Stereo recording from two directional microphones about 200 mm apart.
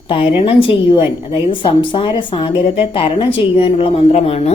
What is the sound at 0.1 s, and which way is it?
A woman's voice, 25° left (ahead or behind).